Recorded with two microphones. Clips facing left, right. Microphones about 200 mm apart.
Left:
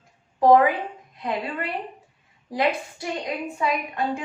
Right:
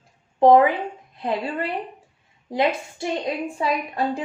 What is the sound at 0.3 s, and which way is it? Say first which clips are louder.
Speech: right 2 dB; 25° right (ahead or behind).